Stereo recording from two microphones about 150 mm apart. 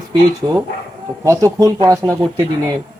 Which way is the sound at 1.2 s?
20° right (ahead or behind).